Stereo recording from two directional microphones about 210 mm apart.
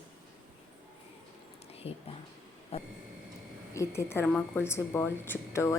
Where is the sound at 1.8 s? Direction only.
30° left (ahead or behind).